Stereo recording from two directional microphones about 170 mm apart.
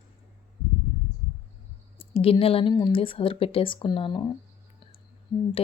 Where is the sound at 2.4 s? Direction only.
35° left (ahead or behind).